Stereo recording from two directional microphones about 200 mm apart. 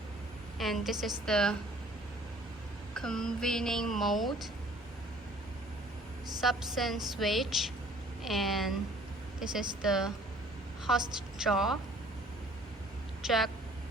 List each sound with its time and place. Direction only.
0.6 s speech: centre (ahead or behind)
2.9 s speech: 5° left (ahead or behind)
6.4 s speech: centre (ahead or behind)
11.3 s speech: centre (ahead or behind)
13.2 s speech: centre (ahead or behind)